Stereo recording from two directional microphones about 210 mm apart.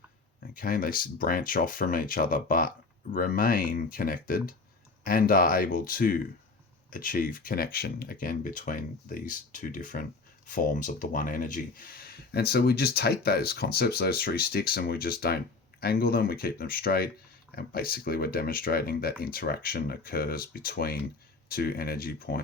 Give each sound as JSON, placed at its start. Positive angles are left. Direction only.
{"t": 0.5, "sound": "speech", "side_deg": 45}